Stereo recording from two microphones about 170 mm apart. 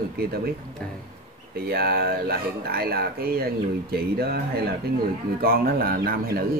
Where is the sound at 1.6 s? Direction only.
65° right (ahead or behind).